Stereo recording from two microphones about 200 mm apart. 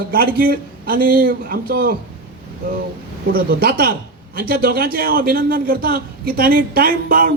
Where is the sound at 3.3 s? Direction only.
50° right (ahead or behind).